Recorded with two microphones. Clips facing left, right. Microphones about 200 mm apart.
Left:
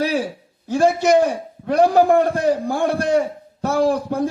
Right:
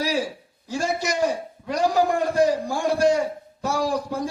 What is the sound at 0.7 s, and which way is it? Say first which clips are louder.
A man's voice: left 10 dB; 55° left (ahead or behind).